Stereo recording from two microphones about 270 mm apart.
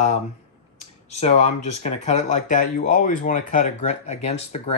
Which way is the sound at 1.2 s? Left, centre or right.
Left.